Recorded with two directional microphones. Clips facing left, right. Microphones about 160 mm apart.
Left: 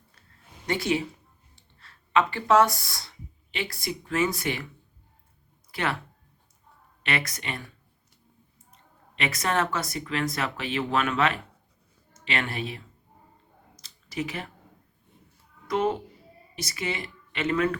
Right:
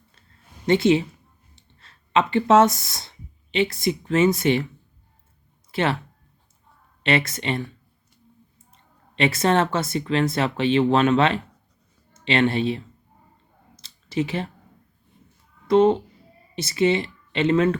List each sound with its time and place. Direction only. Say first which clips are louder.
0.7 s speech: right 9 dB; 25° right (ahead or behind)
5.7 s speech: right 6 dB; 25° right (ahead or behind)
7.0 s speech: right 8 dB; 25° right (ahead or behind)
8.7 s speech: right 11 dB; 30° right (ahead or behind)
13.7 s a sound: right 7 dB; 25° right (ahead or behind)
15.6 s speech: right 9 dB; 25° right (ahead or behind)